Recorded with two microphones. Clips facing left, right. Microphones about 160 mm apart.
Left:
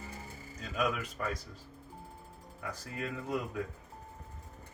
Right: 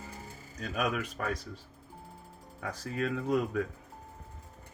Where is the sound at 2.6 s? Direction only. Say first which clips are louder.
Right 6 dB; 80° right.